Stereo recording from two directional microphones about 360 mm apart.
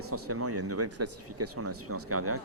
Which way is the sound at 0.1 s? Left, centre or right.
Right.